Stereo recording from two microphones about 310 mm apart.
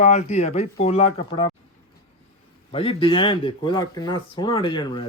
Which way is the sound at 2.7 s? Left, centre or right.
Centre.